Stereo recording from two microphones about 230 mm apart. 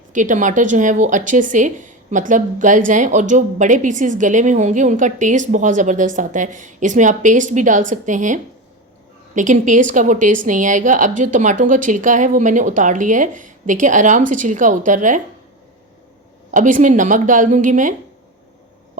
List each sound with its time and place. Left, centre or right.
0.1 s speech: right
16.5 s speech: right